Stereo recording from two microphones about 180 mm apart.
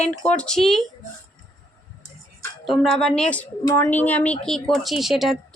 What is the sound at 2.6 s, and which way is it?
A woman's voice, centre (ahead or behind).